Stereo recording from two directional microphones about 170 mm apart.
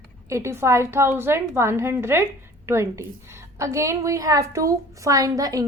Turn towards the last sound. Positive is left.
turn(degrees=-20)  # may be behind; listen again after turning